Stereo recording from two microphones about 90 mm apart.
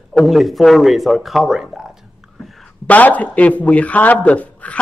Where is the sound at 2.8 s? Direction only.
15° left (ahead or behind).